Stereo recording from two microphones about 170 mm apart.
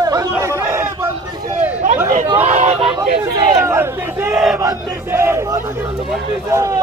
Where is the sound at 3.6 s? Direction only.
15° right (ahead or behind).